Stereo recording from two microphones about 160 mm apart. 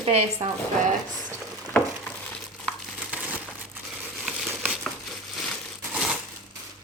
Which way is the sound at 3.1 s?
10° right (ahead or behind).